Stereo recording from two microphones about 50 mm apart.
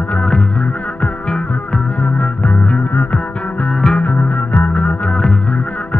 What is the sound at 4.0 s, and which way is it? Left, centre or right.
Music, left.